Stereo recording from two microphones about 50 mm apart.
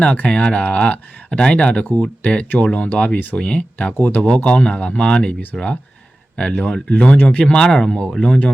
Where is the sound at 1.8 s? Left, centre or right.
Left.